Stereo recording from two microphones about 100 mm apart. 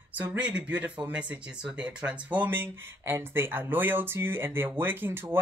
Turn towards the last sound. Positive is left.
turn(degrees=-25)  # may be behind; listen again after turning